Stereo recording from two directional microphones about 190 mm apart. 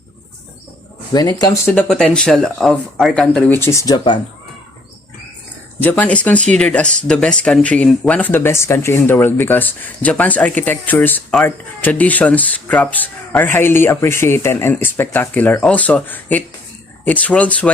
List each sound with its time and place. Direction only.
1.1 s speech: 20° left (ahead or behind)
1.7 s speech: 5° left (ahead or behind); by 4.2 s 25° left (ahead or behind)
5.8 s speech: 10° left (ahead or behind)